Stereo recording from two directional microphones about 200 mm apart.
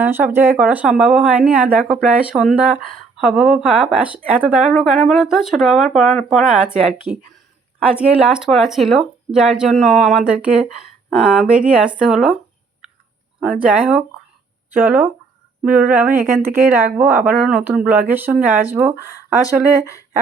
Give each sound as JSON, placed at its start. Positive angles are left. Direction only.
{"t": 0.0, "sound": "speech", "side_deg": -10}
{"t": 13.6, "sound": "speech", "side_deg": -5}
{"t": 19.8, "sound": "speech", "side_deg": 15}